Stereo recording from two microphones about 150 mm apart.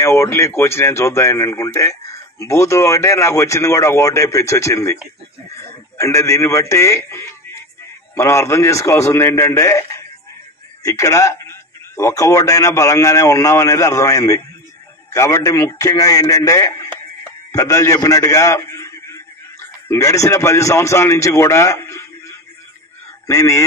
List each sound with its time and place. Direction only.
0.0 s speech: 20° left (ahead or behind)
5.9 s a man's voice: 20° left (ahead or behind)